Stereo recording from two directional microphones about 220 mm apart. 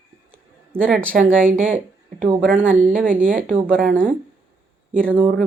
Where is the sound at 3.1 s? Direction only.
40° right (ahead or behind).